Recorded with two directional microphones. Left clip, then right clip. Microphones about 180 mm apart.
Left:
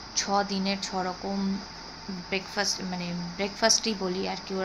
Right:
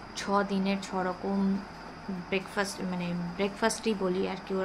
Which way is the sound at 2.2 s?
Centre (ahead or behind).